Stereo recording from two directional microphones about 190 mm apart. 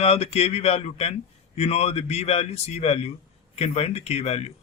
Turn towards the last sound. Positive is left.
turn(degrees=35)  # may be behind; listen again after turning